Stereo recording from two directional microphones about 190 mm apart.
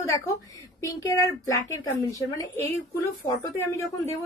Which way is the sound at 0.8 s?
15° left (ahead or behind).